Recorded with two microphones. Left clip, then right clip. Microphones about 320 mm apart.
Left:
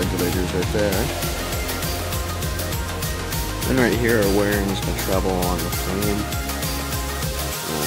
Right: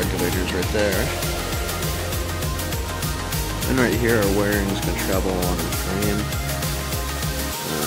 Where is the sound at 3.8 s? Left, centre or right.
Centre.